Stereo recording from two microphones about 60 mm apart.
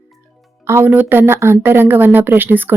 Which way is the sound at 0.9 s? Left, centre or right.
Right.